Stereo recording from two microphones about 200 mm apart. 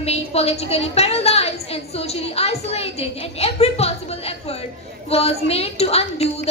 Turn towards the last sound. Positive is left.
turn(degrees=30)  # may be behind; listen again after turning